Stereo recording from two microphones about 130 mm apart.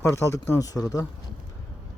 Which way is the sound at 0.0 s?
20° left (ahead or behind).